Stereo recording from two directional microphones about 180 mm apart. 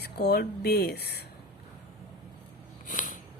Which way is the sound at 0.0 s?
65° left (ahead or behind).